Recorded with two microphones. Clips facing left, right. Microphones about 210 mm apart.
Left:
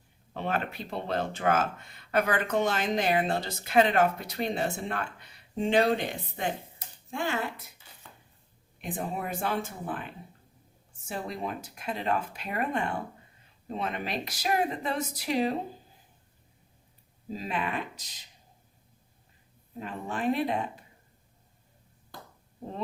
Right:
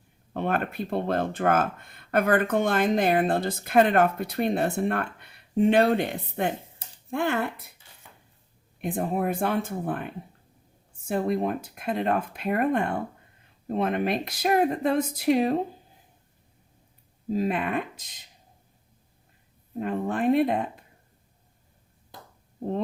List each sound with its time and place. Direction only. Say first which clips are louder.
0.3 s speech: right 5 dB; 55° right (ahead or behind)
8.8 s speech: right 7 dB; 55° right (ahead or behind)
17.3 s speech: right 7 dB; 55° right (ahead or behind)
19.8 s speech: right 6 dB; 55° right (ahead or behind)